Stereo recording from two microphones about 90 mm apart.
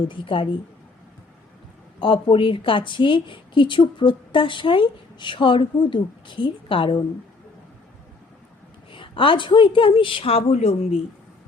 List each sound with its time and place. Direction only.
0.0 s a woman's voice: 70° left (ahead or behind)
2.0 s a woman's voice: 70° left (ahead or behind)
8.9 s a woman's voice: 75° left (ahead or behind); by 10.8 s 90° left